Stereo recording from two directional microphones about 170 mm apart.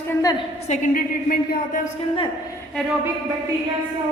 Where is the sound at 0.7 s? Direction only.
50° left (ahead or behind).